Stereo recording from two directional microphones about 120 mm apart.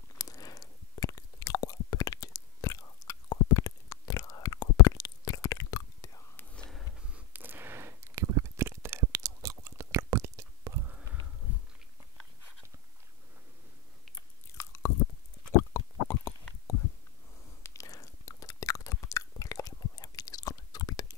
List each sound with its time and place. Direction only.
0.2 s chewing: 30° left (ahead or behind)
6.3 s whispering: 10° left (ahead or behind)
6.8 s a sound: 10° right (ahead or behind)
14.6 s chewing: 25° left (ahead or behind)
15.5 s a sound: 20° left (ahead or behind)
17.6 s chewing: 30° left (ahead or behind)